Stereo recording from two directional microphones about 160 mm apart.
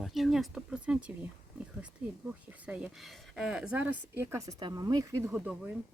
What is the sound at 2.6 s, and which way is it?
Speech, 5° right (ahead or behind).